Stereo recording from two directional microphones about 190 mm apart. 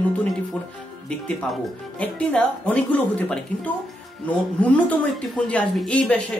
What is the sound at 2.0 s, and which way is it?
Speech, 5° left (ahead or behind).